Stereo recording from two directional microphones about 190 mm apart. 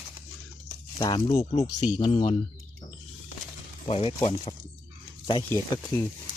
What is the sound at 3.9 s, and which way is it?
Speech, 30° left (ahead or behind).